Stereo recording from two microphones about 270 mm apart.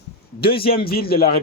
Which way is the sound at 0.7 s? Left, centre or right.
Left.